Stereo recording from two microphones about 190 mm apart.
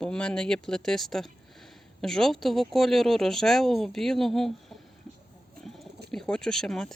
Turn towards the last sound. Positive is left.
turn(degrees=5)  # may be behind; listen again after turning